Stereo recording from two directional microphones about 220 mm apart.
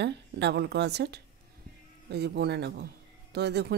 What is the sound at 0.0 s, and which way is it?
A woman's voice, 50° right (ahead or behind).